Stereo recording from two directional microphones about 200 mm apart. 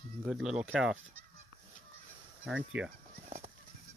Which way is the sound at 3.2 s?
40° right (ahead or behind).